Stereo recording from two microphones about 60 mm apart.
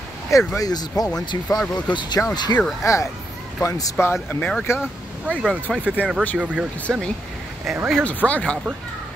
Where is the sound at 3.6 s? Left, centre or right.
Left.